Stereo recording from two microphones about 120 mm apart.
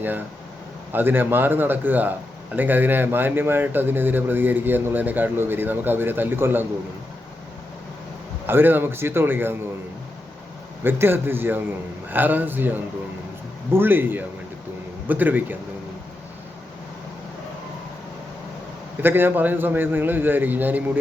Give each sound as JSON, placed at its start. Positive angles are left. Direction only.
{"t": 0.9, "sound": "speech", "side_deg": -15}
{"t": 8.4, "sound": "speech", "side_deg": -15}
{"t": 10.8, "sound": "speech", "side_deg": -20}
{"t": 19.0, "sound": "speech", "side_deg": -15}